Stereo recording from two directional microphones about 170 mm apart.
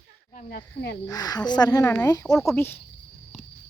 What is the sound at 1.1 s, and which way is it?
Speech, 25° left (ahead or behind).